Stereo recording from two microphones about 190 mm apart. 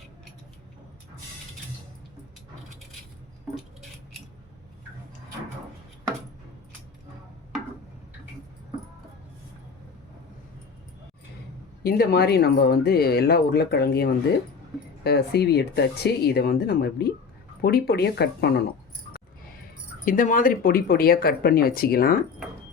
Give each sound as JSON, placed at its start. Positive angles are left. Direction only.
{"t": 3.5, "sound": "keys jangling", "side_deg": 0}
{"t": 11.8, "sound": "speech", "side_deg": 55}
{"t": 20.1, "sound": "speech", "side_deg": 45}